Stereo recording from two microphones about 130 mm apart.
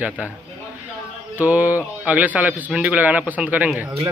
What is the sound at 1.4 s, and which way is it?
Speech, 10° right (ahead or behind).